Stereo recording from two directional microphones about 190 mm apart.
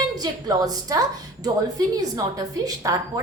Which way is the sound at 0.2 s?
20° right (ahead or behind).